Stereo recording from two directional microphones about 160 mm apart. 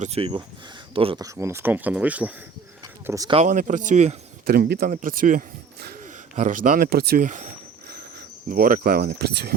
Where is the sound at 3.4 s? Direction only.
55° right (ahead or behind).